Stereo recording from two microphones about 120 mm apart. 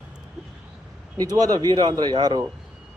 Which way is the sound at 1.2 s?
30° right (ahead or behind).